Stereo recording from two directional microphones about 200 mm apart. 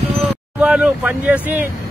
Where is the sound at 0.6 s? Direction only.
5° right (ahead or behind).